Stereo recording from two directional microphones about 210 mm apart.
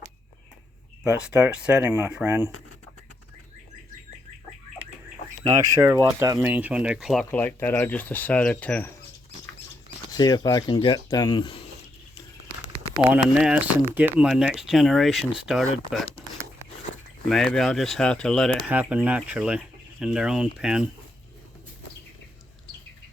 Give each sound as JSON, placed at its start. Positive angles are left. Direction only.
{"t": 1.0, "sound": "speech", "side_deg": -5}
{"t": 5.5, "sound": "speech", "side_deg": -15}
{"t": 7.3, "sound": "speech", "side_deg": 10}
{"t": 10.1, "sound": "speech", "side_deg": 20}
{"t": 13.0, "sound": "speech", "side_deg": -5}
{"t": 17.2, "sound": "speech", "side_deg": 5}